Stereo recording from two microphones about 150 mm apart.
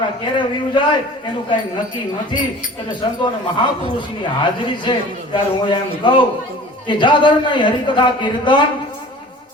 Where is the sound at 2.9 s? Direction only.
30° left (ahead or behind).